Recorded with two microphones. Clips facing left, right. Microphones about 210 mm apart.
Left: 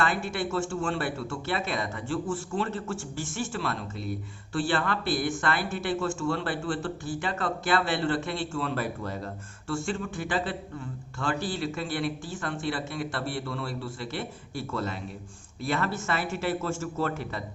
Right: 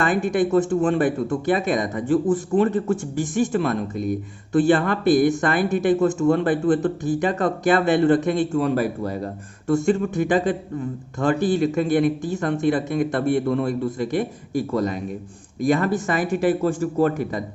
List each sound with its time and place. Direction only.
0.0 s a man's voice: 15° right (ahead or behind)